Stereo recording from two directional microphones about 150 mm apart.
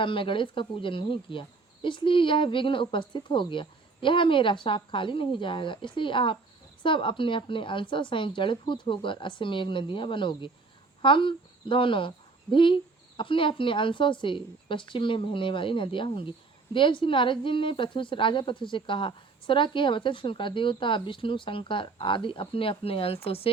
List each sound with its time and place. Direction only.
0.0 s speech: 35° left (ahead or behind)